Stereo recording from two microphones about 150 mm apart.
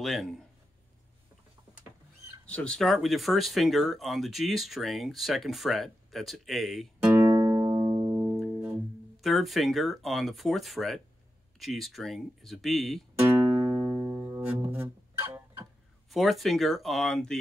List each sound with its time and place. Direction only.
0.0 s speech: centre (ahead or behind)
2.4 s speech: 5° left (ahead or behind)
7.1 s music: 15° right (ahead or behind)
9.2 s speech: centre (ahead or behind)
15.1 s music: 15° right (ahead or behind)
16.1 s speech: centre (ahead or behind)